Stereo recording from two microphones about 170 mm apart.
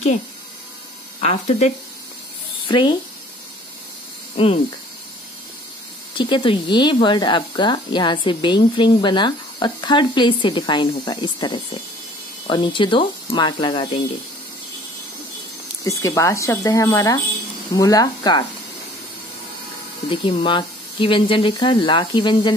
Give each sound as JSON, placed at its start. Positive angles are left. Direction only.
{"t": 1.2, "sound": "speech", "side_deg": 40}
{"t": 2.7, "sound": "speech", "side_deg": 25}
{"t": 6.1, "sound": "speech", "side_deg": 30}
{"t": 15.8, "sound": "speech", "side_deg": 20}
{"t": 20.1, "sound": "speech", "side_deg": 30}